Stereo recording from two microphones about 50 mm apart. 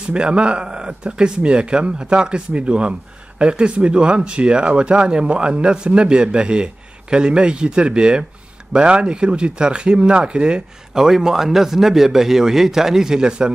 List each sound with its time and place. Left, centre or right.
0.1 s speech: centre